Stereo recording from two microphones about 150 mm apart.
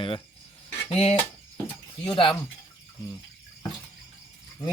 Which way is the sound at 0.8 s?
45° left (ahead or behind).